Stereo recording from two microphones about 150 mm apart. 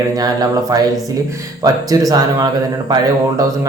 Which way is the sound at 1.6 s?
25° right (ahead or behind).